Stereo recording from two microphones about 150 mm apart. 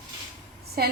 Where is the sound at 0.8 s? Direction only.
85° right.